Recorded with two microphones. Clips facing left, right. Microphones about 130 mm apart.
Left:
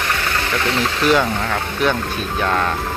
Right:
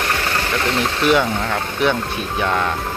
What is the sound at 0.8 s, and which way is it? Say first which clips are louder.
Speech: even; 20° right (ahead or behind).